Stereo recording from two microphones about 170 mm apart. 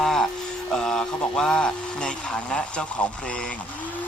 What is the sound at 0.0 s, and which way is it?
Music, centre (ahead or behind).